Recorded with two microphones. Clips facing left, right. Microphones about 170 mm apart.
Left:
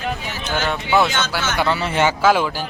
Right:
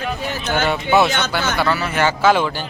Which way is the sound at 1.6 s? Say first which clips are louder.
Left 2 dB; 25° left (ahead or behind).